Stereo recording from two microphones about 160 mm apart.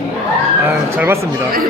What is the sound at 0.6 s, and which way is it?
Speech, 10° right (ahead or behind).